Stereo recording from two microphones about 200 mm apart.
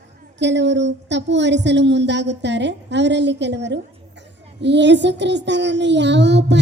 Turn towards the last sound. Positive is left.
turn(degrees=-60)  # may be behind; listen again after turning